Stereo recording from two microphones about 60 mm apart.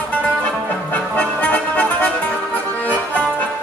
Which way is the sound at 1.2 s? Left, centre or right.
Left.